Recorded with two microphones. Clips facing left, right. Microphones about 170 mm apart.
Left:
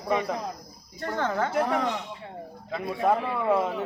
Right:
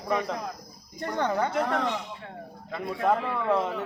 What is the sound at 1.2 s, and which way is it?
Speech, 15° right (ahead or behind).